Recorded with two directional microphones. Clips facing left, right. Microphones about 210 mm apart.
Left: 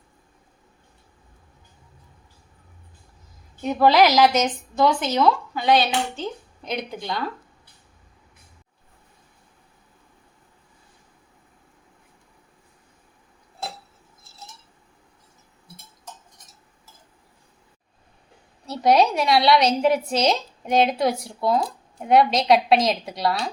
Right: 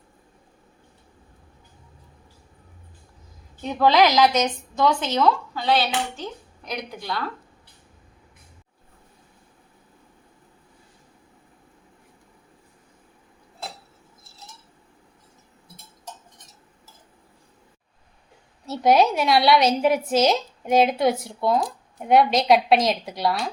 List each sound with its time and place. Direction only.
3.6 s a woman's voice: 10° left (ahead or behind)
18.6 s a woman's voice: centre (ahead or behind)